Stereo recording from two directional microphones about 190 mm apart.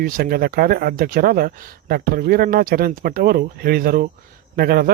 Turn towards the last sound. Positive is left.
turn(degrees=-50)  # may be behind; listen again after turning